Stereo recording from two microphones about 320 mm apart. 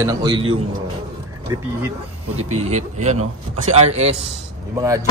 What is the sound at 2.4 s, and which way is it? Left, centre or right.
A man's voice, centre.